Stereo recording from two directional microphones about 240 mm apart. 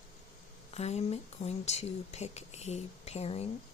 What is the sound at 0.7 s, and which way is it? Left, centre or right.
Speech, left.